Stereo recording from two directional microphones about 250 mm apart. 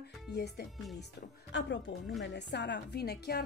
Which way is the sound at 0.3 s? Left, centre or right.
Left.